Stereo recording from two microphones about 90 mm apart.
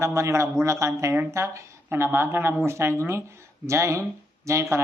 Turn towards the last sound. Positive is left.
turn(degrees=-30)  # may be behind; listen again after turning